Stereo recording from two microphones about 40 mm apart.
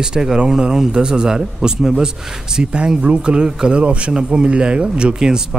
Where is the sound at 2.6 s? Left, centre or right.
Right.